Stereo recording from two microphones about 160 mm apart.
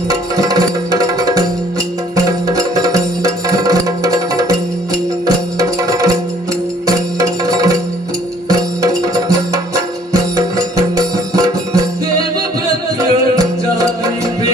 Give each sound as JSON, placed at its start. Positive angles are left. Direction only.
{"t": 0.1, "sound": "music", "side_deg": -20}
{"t": 13.0, "sound": "music", "side_deg": -20}